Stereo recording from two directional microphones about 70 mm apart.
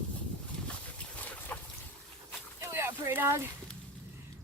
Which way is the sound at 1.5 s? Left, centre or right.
Left.